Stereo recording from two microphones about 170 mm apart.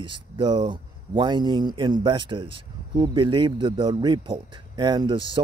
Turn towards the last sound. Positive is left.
turn(degrees=-30)  # may be behind; listen again after turning